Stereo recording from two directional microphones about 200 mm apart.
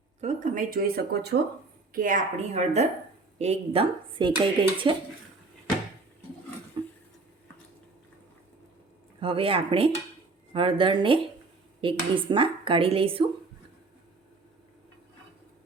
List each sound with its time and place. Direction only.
0.2 s speech: 35° right (ahead or behind)
6.8 s a sound: 20° right (ahead or behind)
9.2 s speech: 25° right (ahead or behind)